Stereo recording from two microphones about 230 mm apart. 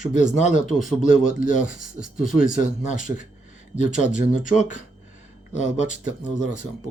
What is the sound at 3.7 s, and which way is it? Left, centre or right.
Speech, left.